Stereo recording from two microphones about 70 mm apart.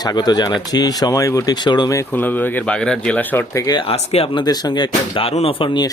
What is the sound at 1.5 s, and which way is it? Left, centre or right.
Speech, left.